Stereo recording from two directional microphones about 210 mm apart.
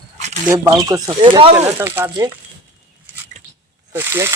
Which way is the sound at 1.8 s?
15° right (ahead or behind).